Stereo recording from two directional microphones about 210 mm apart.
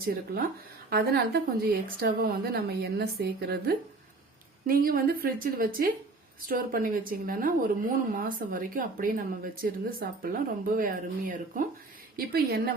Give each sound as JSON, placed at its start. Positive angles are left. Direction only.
{"t": 0.0, "sound": "a woman's voice", "side_deg": -45}